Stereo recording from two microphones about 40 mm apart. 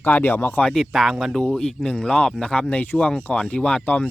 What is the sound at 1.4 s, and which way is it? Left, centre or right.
Speech, left.